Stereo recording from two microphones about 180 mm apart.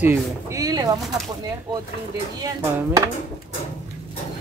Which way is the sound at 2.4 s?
20° right (ahead or behind).